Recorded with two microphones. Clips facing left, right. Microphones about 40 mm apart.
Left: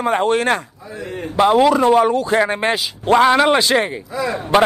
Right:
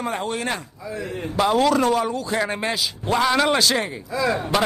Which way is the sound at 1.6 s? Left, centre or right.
Left.